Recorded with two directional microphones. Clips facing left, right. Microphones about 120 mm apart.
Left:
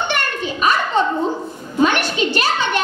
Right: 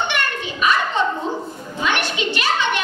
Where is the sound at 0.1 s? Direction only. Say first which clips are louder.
Left 2 dB; 40° left (ahead or behind).